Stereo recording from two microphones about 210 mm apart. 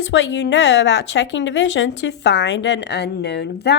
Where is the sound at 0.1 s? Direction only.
60° left (ahead or behind).